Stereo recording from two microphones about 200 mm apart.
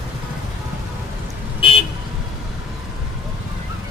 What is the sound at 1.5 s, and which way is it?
Vehicle, 25° left (ahead or behind).